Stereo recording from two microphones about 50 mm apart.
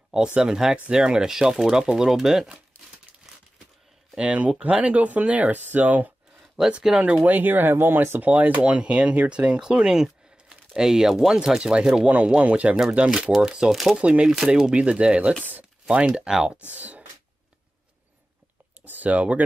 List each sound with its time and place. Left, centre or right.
0.4 s speech: centre
4.2 s speech: right
6.9 s speech: centre
7.2 s speech: right
8.2 s speech: right; by 12.1 s centre
12.1 s speech: right
13.7 s speech: centre
13.9 s speech: right
16.3 s speech: centre
16.7 s speech: right
18.8 s clicking: right